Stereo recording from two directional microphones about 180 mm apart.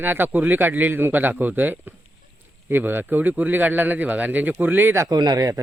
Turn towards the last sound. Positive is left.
turn(degrees=-20)  # may be behind; listen again after turning